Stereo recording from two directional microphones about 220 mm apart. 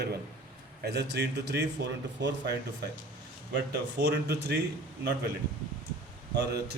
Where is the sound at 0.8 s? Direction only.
50° right (ahead or behind).